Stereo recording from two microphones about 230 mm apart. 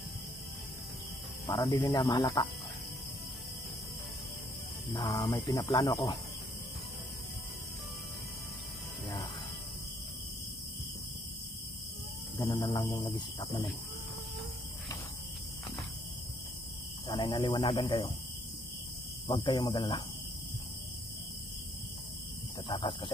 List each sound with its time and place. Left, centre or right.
1.5 s speech: centre
4.9 s speech: centre
12.4 s speech: centre
17.1 s speech: left
19.2 s speech: centre
22.7 s speech: left